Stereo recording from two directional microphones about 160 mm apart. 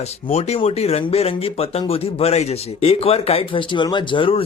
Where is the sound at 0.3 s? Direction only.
40° left (ahead or behind).